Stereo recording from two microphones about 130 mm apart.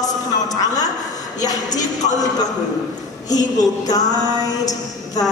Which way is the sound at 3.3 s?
30° left (ahead or behind).